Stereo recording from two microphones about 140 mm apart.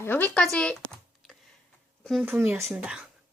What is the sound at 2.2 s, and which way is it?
Speech, 15° right (ahead or behind).